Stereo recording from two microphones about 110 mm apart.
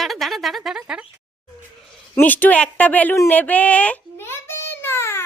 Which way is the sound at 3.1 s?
15° left (ahead or behind).